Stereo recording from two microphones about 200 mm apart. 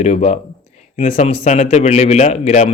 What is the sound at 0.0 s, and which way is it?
A man's voice, 35° left (ahead or behind).